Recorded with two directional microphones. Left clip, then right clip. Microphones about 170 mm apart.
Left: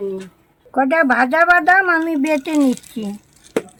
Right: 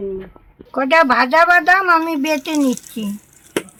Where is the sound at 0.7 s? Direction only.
Centre (ahead or behind).